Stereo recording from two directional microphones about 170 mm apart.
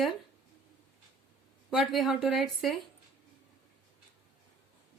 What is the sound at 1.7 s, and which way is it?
Speech, centre (ahead or behind).